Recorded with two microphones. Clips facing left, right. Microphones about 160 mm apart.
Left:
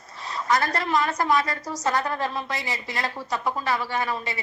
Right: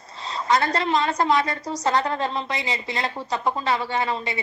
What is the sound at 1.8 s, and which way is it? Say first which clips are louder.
A woman's voice: right 2 dB; 25° right (ahead or behind).